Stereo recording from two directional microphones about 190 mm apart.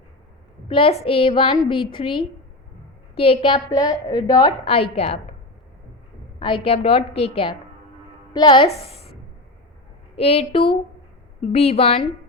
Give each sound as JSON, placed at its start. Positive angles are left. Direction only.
{"t": 0.7, "sound": "a woman's voice", "side_deg": 30}
{"t": 3.2, "sound": "a woman's voice", "side_deg": 30}
{"t": 6.4, "sound": "a woman's voice", "side_deg": 30}
{"t": 10.2, "sound": "a woman's voice", "side_deg": 30}